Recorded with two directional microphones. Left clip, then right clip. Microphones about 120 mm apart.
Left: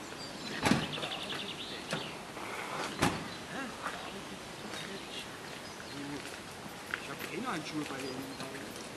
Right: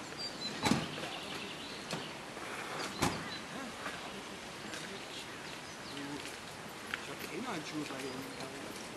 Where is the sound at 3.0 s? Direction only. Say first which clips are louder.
Left 3 dB; 20° left (ahead or behind).